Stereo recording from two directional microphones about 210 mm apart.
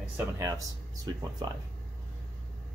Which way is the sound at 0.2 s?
15° right (ahead or behind).